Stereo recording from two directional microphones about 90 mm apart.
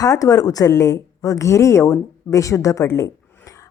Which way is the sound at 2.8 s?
30° left (ahead or behind).